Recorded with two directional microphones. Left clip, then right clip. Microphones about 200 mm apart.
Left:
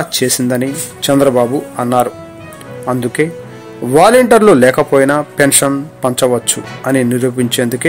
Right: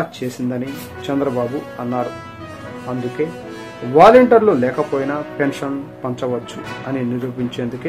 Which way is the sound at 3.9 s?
45° left (ahead or behind).